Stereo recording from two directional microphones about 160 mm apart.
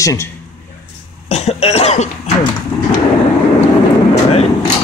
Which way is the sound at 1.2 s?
45° left (ahead or behind).